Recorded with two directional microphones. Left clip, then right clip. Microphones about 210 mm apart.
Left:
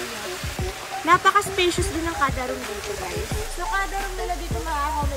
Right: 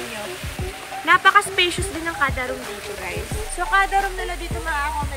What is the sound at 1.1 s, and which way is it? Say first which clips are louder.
Speech: right 3 dB; 25° left (ahead or behind).